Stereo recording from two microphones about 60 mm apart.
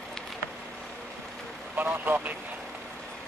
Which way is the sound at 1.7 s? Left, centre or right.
Right.